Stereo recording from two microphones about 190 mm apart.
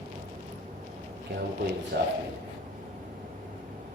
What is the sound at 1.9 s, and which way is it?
Speech, 60° right (ahead or behind).